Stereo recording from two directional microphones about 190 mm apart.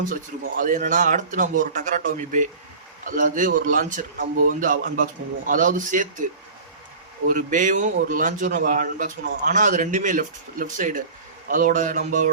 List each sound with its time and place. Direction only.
0.5 s a man's voice: 45° right (ahead or behind)
7.3 s a man's voice: 45° right (ahead or behind)